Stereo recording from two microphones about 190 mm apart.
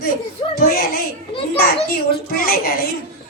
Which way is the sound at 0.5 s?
50° left (ahead or behind).